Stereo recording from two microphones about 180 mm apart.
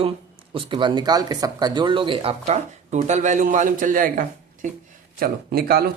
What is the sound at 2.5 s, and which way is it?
A man's voice, 40° right (ahead or behind).